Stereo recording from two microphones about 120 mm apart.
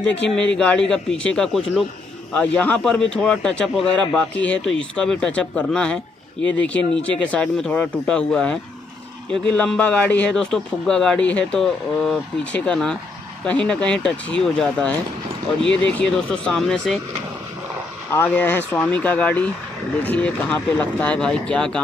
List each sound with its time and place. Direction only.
0.0 s a man's voice: 10° left (ahead or behind)
18.1 s a man's voice: 15° left (ahead or behind)